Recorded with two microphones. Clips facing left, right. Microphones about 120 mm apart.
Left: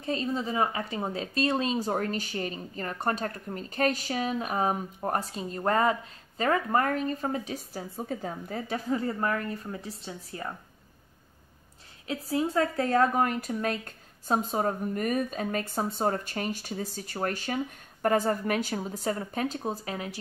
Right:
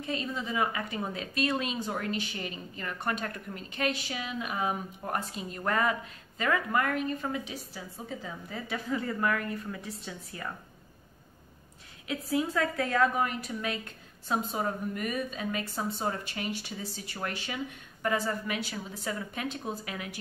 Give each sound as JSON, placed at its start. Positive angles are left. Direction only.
{"t": 0.0, "sound": "speech", "side_deg": 35}
{"t": 12.3, "sound": "a woman's voice", "side_deg": 35}